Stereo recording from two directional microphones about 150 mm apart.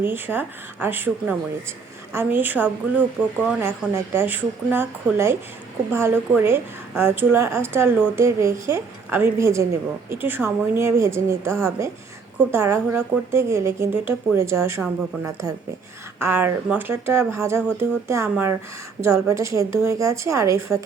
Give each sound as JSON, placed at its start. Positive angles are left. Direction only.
{"t": 0.0, "sound": "a woman's voice", "side_deg": -15}